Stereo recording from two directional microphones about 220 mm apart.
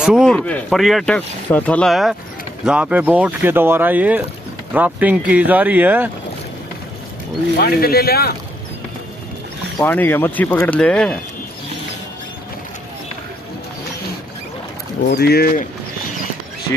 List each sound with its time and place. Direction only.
0.0 s speech: centre (ahead or behind)
7.5 s speech: 45° left (ahead or behind)
9.8 s speech: 10° left (ahead or behind)
15.0 s speech: 45° left (ahead or behind)